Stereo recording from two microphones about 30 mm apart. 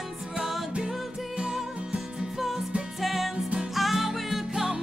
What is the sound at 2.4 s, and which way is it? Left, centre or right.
Music, centre.